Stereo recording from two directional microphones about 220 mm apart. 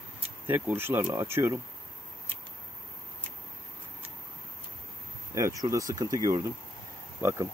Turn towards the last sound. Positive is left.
turn(degrees=-10)  # may be behind; listen again after turning